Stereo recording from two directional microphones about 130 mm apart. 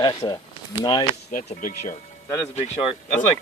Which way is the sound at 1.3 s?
90° left.